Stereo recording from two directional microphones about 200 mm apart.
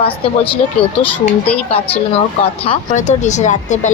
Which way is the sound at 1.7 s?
30° left (ahead or behind).